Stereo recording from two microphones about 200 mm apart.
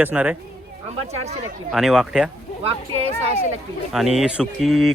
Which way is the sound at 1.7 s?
Centre (ahead or behind).